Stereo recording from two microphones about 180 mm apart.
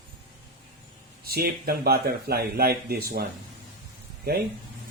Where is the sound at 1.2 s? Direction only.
60° right (ahead or behind).